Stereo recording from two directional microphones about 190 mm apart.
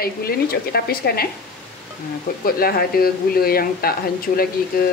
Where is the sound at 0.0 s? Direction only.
55° left (ahead or behind).